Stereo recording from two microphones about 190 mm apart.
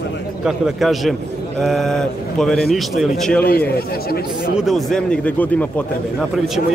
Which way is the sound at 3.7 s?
50° left (ahead or behind).